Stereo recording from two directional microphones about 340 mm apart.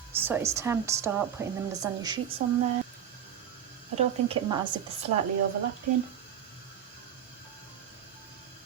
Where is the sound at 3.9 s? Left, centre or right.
Centre.